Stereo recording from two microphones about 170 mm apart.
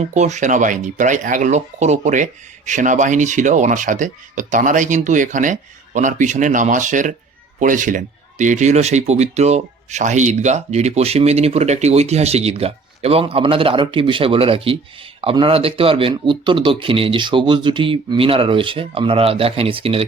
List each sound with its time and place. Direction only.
0.1 s speech: 45° right (ahead or behind)